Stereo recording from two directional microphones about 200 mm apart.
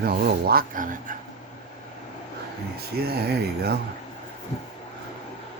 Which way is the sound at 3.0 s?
50° right (ahead or behind).